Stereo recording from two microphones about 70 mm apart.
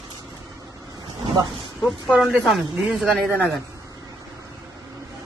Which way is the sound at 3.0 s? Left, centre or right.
Centre.